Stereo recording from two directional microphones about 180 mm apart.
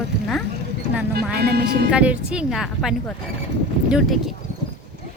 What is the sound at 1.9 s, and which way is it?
A woman's voice, 5° right (ahead or behind).